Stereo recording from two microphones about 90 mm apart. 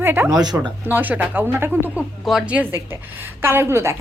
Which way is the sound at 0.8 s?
20° right (ahead or behind).